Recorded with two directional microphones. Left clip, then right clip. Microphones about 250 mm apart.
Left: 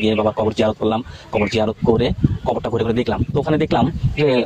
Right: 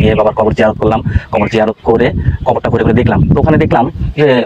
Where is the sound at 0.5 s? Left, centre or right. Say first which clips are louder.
Right 8 dB; right.